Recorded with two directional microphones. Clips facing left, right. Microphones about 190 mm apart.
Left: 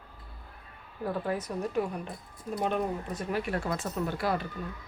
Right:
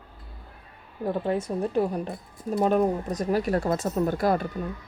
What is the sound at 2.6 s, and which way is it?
Speech, 40° right (ahead or behind).